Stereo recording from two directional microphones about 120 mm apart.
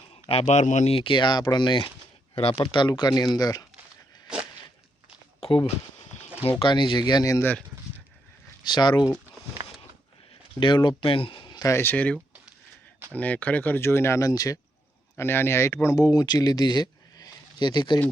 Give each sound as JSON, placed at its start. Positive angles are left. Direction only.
{"t": 0.1, "sound": "speech", "side_deg": 55}
{"t": 0.9, "sound": "speech", "side_deg": 45}
{"t": 5.6, "sound": "a sound", "side_deg": 60}
{"t": 6.6, "sound": "speech", "side_deg": 40}
{"t": 8.6, "sound": "speech", "side_deg": 35}
{"t": 10.6, "sound": "speech", "side_deg": 40}
{"t": 11.7, "sound": "speech", "side_deg": 15}
{"t": 15.2, "sound": "speech", "side_deg": 20}